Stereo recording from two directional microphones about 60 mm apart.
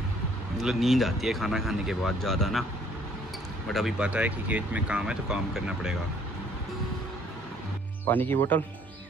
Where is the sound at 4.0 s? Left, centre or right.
Right.